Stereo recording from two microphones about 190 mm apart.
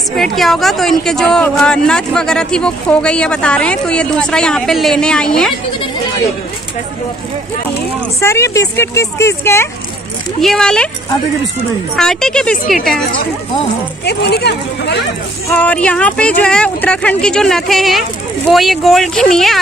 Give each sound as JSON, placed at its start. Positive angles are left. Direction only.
{"t": 0.1, "sound": "speech", "side_deg": 0}
{"t": 8.2, "sound": "a woman's voice", "side_deg": 15}
{"t": 10.4, "sound": "speech", "side_deg": 5}
{"t": 12.0, "sound": "speech", "side_deg": 5}
{"t": 14.0, "sound": "speech", "side_deg": 60}
{"t": 15.4, "sound": "speech", "side_deg": 5}